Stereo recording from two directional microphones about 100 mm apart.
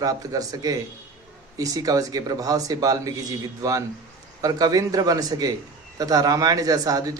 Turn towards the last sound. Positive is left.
turn(degrees=-35)  # may be behind; listen again after turning